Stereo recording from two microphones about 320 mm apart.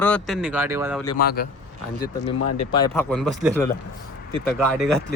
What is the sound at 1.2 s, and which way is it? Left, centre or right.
Speech, left.